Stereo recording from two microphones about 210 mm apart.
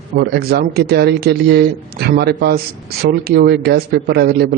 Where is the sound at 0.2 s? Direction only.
50° right (ahead or behind).